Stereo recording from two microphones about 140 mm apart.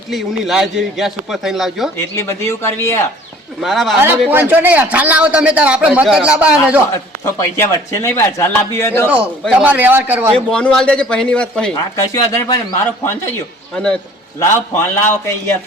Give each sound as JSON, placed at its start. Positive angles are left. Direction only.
{"t": 0.1, "sound": "speech", "side_deg": 0}
{"t": 2.1, "sound": "a man's voice", "side_deg": 20}
{"t": 3.6, "sound": "speech", "side_deg": 0}
{"t": 3.9, "sound": "a man's voice", "side_deg": -15}
{"t": 7.3, "sound": "a man's voice", "side_deg": 20}
{"t": 9.0, "sound": "a man's voice", "side_deg": -10}
{"t": 10.3, "sound": "a man's voice", "side_deg": 5}
{"t": 11.9, "sound": "a man's voice", "side_deg": 20}
{"t": 13.7, "sound": "a man's voice", "side_deg": 5}
{"t": 14.3, "sound": "a man's voice", "side_deg": 20}